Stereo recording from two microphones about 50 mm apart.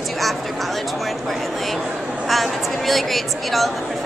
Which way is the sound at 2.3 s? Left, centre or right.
Centre.